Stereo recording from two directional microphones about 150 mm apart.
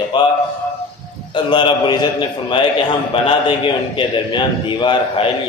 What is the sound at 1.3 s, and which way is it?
A man's voice, 30° left (ahead or behind).